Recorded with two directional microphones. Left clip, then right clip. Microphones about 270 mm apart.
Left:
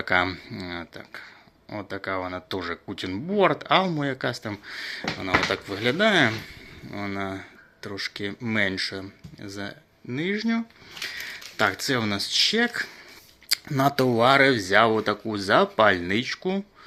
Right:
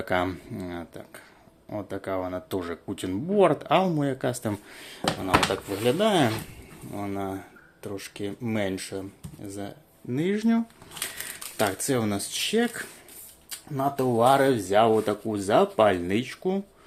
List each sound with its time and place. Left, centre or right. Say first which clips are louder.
0.0 s speech: left 4 dB; centre
13.5 s speech: left 5 dB; left
14.2 s speech: left 1 dB; centre